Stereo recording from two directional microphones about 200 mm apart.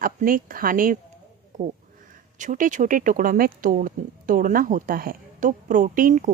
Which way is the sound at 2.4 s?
40° right (ahead or behind).